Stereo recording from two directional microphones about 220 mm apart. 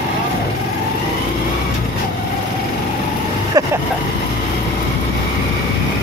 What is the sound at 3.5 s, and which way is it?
Vehicle, 15° right (ahead or behind).